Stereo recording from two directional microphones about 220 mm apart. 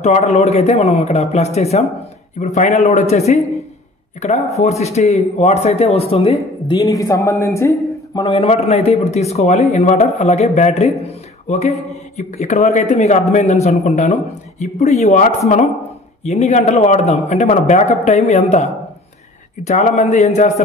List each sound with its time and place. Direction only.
0.0 s speech: 30° left (ahead or behind)
6.8 s a man's voice: 15° left (ahead or behind)
8.3 s speech: 30° left (ahead or behind)